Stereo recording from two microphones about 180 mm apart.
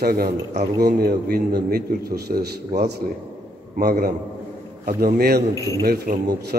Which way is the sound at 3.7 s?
55° right (ahead or behind).